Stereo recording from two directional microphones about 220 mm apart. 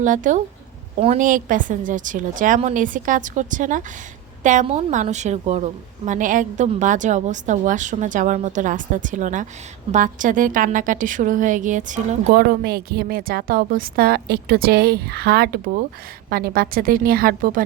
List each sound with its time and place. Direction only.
0.0 s a woman's voice: 35° right (ahead or behind)